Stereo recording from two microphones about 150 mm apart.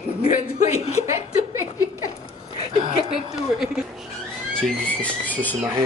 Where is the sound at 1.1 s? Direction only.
20° right (ahead or behind).